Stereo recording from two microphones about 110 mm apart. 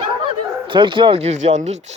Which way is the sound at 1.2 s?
80° right.